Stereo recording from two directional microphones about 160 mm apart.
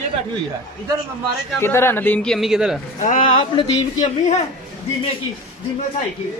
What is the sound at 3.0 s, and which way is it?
Speech, 50° left (ahead or behind).